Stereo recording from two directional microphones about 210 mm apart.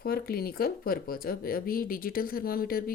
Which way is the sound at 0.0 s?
45° left (ahead or behind).